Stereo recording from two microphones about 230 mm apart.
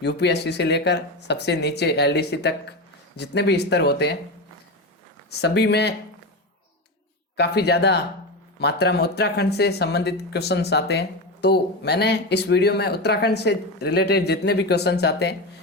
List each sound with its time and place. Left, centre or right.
0.0 s speech: left
5.4 s speech: left
7.3 s speech: left